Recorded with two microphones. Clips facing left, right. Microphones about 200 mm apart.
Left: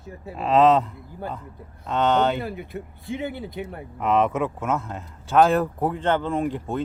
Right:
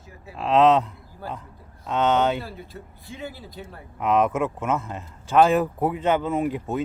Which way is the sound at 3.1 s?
25° left (ahead or behind).